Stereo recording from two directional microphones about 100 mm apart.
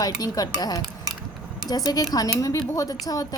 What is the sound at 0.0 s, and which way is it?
Speech, 40° left (ahead or behind).